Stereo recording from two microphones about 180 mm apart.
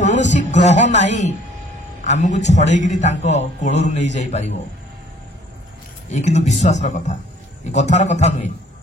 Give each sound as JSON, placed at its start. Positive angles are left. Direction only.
{"t": 0.0, "sound": "a man's voice", "side_deg": 40}
{"t": 6.1, "sound": "a man's voice", "side_deg": 40}